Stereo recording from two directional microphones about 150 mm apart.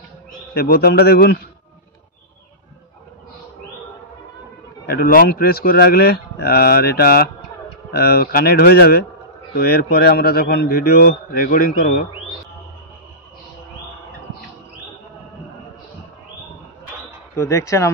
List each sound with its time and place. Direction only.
0.3 s speech: 90° left
4.8 s speech: 75° left (ahead or behind)
11.5 s a man's voice: 70° left (ahead or behind)
17.4 s speech: 20° left (ahead or behind)